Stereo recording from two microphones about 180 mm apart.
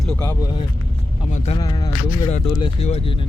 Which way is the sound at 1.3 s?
40° left (ahead or behind).